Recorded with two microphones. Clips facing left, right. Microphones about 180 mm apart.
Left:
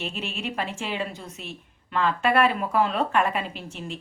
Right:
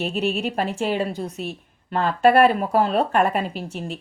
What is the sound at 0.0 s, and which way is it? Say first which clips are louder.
Speech: right 9 dB; 40° right (ahead or behind).